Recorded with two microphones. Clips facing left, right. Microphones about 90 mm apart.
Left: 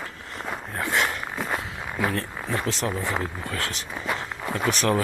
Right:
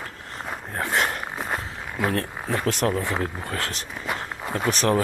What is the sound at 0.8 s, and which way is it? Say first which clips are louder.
Speech: right 1 dB; 35° right (ahead or behind).